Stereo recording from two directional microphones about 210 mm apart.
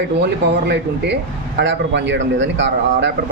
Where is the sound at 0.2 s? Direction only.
55° right (ahead or behind).